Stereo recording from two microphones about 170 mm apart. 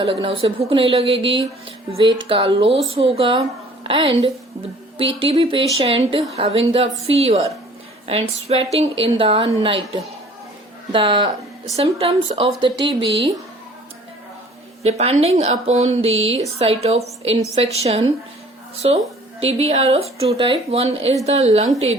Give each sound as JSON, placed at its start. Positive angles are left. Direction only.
{"t": 0.0, "sound": "a woman's voice", "side_deg": -30}
{"t": 11.8, "sound": "a woman's voice", "side_deg": -35}
{"t": 14.8, "sound": "a woman's voice", "side_deg": -40}